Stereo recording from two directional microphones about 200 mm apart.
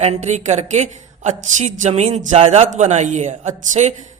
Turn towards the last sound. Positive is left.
turn(degrees=-35)  # may be behind; listen again after turning